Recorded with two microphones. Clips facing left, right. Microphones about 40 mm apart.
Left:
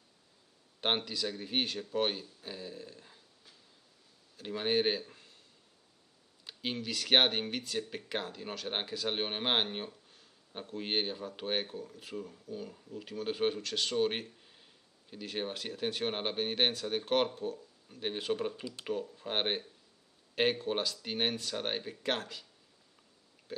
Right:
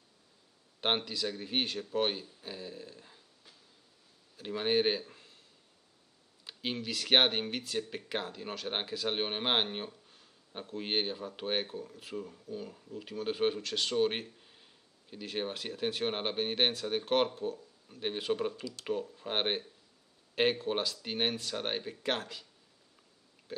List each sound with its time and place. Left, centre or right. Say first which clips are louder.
0.7 s speech: right 1 dB; centre
6.4 s speech: right 1 dB; centre
18.6 s speech: even; centre
18.9 s speech: right 1 dB; centre